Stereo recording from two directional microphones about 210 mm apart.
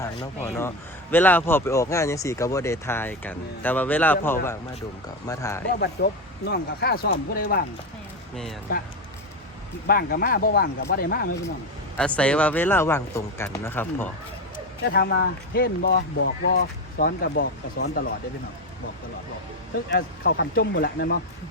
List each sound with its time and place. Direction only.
0.4 s speech: 10° left (ahead or behind)
5.8 s speech: 50° left (ahead or behind)
9.8 s speech: 45° left (ahead or behind)
11.9 s speech: 5° left (ahead or behind)
14.8 s speech: 50° left (ahead or behind)
19.9 s speech: 45° left (ahead or behind)